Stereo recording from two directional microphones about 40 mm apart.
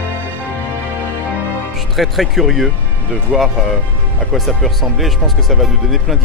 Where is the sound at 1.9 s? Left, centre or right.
Centre.